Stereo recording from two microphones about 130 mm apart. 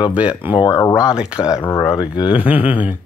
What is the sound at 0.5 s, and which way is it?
Speech, 30° left (ahead or behind).